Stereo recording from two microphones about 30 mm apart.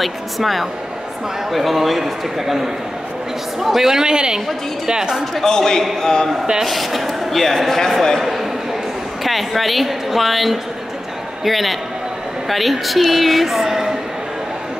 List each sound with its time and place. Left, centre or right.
0.0 s a woman's voice: centre
3.9 s a woman's voice: right
5.3 s a man's voice: centre
6.6 s speech: centre
8.2 s a sound: centre
9.2 s a woman's voice: centre